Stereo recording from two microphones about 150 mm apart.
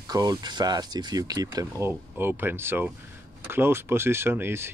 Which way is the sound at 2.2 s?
15° right (ahead or behind).